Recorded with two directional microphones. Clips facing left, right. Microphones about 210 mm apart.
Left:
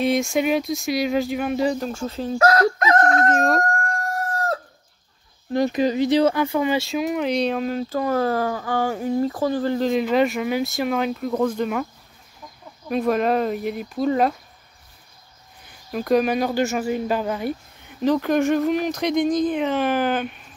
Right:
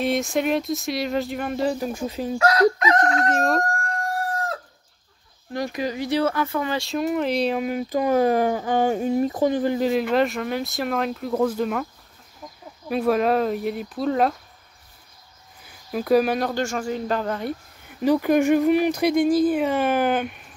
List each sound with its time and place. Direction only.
0.0 s speech: centre (ahead or behind)
1.9 s speech: 15° right (ahead or behind)
2.3 s crowing: 45° left (ahead or behind)
3.3 s speech: centre (ahead or behind)
5.5 s speech: 25° left (ahead or behind)
6.8 s speech: centre (ahead or behind)
15.6 s speech: 5° right (ahead or behind)
17.8 s speech: 10° right (ahead or behind)